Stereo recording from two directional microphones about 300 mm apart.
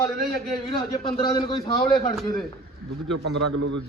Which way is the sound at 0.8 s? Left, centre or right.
Centre.